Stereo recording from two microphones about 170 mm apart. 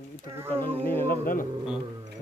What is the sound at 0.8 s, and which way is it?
Speech, 10° left (ahead or behind).